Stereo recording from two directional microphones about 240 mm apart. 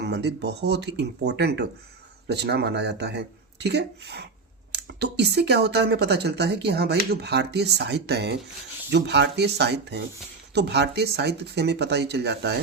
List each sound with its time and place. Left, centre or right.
0.0 s speech: right